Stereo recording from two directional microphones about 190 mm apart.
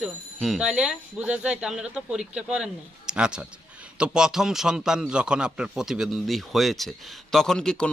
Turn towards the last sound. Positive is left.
turn(degrees=5)  # may be behind; listen again after turning